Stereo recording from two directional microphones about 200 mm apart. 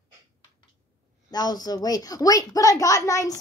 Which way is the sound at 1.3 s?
20° left (ahead or behind).